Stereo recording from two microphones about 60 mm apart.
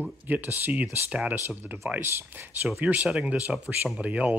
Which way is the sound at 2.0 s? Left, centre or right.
Right.